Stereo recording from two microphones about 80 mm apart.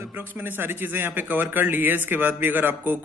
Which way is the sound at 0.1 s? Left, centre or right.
Right.